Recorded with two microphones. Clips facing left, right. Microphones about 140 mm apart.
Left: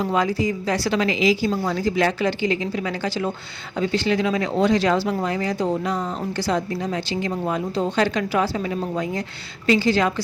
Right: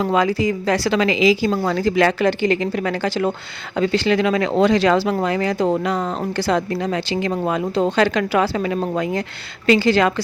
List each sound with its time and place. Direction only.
0.0 s speech: 85° right; by 9.2 s 65° right (ahead or behind)
9.6 s speech: 75° right (ahead or behind)